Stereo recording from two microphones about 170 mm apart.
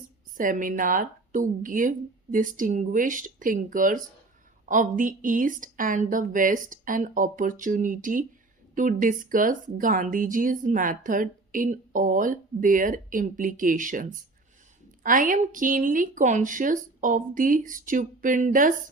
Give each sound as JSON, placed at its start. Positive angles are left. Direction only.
{"t": 0.3, "sound": "speech", "side_deg": -50}